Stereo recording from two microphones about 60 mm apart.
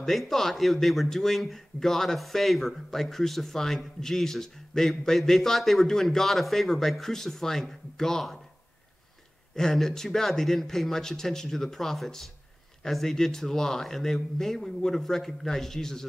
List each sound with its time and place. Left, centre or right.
0.0 s a man's voice: centre
9.6 s a man's voice: centre